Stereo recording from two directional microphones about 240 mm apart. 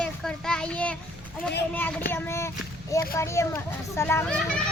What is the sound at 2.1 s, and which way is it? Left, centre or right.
Speech, centre.